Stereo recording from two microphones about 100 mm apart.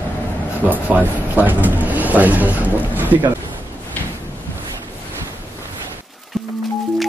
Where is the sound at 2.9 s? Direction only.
15° right (ahead or behind).